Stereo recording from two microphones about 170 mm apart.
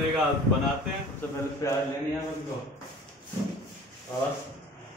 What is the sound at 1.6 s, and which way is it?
Mantra, 20° left (ahead or behind).